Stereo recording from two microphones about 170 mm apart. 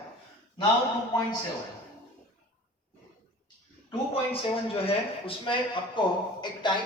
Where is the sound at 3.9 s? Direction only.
35° left (ahead or behind).